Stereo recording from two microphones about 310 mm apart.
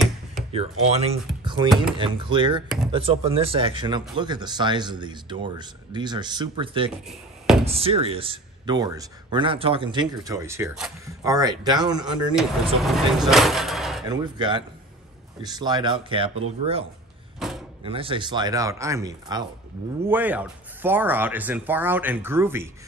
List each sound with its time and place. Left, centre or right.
0.3 s speech: centre
7.1 s a sound: centre
7.6 s speech: centre
12.4 s speech: centre
14.0 s speech: centre
17.4 s door: centre
17.8 s speech: centre